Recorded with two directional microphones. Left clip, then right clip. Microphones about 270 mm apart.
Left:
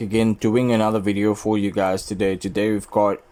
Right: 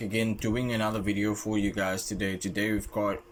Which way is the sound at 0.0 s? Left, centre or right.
Centre.